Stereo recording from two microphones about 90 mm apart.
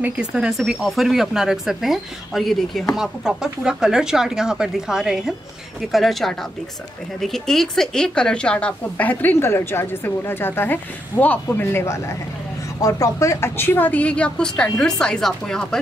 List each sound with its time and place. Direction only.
0.0 s speech: 10° right (ahead or behind); by 15.8 s 5° left (ahead or behind)